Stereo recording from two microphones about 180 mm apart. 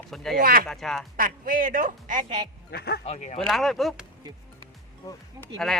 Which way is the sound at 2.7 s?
60° left (ahead or behind).